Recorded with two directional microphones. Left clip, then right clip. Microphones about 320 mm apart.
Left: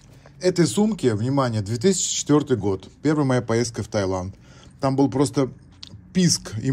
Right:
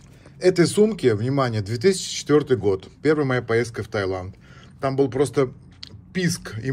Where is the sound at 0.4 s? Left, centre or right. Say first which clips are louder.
Right 3 dB; centre.